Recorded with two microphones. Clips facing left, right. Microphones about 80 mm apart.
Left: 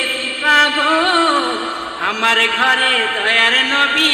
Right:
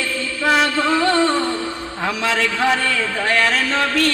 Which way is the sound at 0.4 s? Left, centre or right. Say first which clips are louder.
Left 3 dB; left.